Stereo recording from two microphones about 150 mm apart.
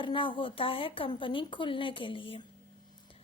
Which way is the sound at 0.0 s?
35° left (ahead or behind).